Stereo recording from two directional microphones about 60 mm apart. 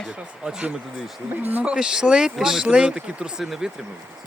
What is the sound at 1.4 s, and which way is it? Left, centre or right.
Speech, right.